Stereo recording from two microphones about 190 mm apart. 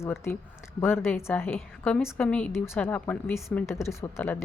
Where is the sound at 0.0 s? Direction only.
15° left (ahead or behind).